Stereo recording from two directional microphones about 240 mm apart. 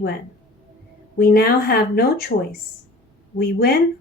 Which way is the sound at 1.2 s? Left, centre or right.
Left.